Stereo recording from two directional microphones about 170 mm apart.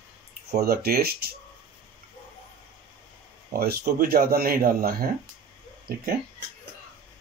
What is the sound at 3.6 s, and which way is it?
Speech, 65° right (ahead or behind).